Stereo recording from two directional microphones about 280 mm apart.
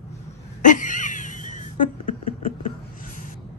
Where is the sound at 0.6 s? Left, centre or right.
Left.